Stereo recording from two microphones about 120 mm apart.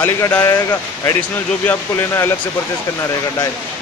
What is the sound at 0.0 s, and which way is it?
Speech, 20° left (ahead or behind).